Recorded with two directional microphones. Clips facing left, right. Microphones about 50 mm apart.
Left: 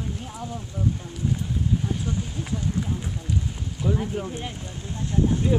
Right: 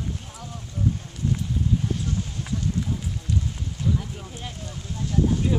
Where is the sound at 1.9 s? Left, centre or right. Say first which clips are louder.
Even; centre.